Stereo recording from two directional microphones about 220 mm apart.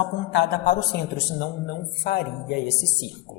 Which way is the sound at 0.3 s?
50° left (ahead or behind).